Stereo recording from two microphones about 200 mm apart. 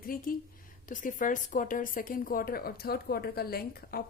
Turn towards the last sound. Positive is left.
turn(degrees=50)  # may be behind; listen again after turning